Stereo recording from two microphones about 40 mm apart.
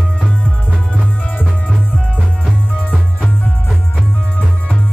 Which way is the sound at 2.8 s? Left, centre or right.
Left.